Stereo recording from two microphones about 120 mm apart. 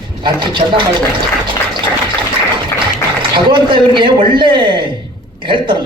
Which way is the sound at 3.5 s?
45° right (ahead or behind).